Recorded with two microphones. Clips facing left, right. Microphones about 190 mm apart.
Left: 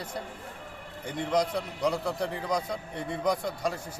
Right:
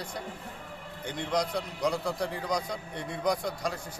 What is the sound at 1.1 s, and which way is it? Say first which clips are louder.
A man's voice: left 3 dB; 5° left (ahead or behind).